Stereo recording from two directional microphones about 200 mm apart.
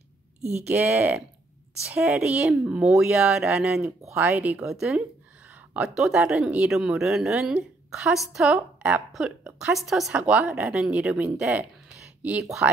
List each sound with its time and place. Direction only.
0.4 s speech: 35° right (ahead or behind)
0.7 s a woman's voice: 10° right (ahead or behind)